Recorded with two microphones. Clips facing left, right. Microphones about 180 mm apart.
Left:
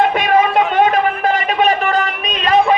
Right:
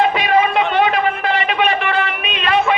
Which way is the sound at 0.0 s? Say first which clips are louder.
Left 1 dB; 50° left (ahead or behind).